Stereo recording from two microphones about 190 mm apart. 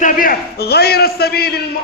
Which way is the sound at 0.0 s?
50° left (ahead or behind).